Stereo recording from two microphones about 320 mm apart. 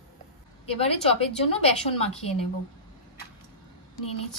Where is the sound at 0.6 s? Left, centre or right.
Centre.